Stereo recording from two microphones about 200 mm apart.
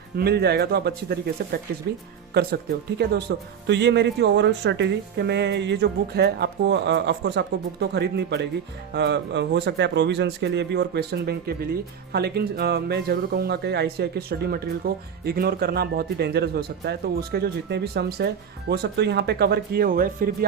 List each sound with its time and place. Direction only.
0.2 s speech: 55° right (ahead or behind)
2.3 s speech: 50° right (ahead or behind)